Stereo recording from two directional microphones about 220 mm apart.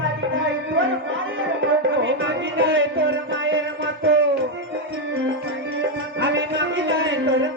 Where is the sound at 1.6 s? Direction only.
60° right (ahead or behind).